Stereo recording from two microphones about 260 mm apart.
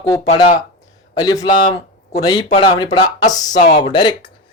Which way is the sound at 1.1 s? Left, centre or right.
Centre.